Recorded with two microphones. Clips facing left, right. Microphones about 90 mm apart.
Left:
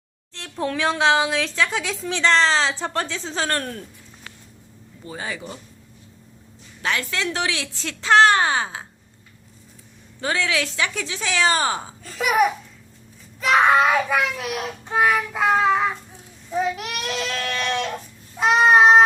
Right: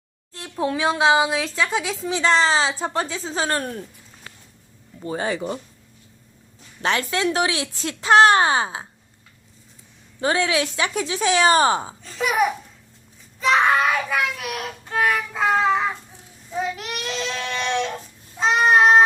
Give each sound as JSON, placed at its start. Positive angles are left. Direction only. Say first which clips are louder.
{"t": 0.3, "sound": "a woman's voice", "louder": "right 1 dB", "side_deg": -10}
{"t": 4.9, "sound": "speech", "louder": "right 7 dB", "side_deg": -35}
{"t": 6.8, "sound": "speech", "louder": "right 3 dB", "side_deg": -25}
{"t": 10.2, "sound": "speech", "louder": "right 3 dB", "side_deg": -20}
{"t": 12.0, "sound": "a child's voice", "louder": "left 2 dB", "side_deg": 5}
{"t": 13.4, "sound": "child singing", "louder": "left 2 dB", "side_deg": 10}
{"t": 16.7, "sound": "goat", "louder": "left 1 dB", "side_deg": 5}
{"t": 18.3, "sound": "a sound", "louder": "left 2 dB", "side_deg": 10}